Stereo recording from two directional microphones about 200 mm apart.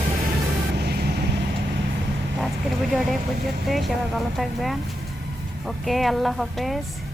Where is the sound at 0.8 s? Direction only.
55° right (ahead or behind).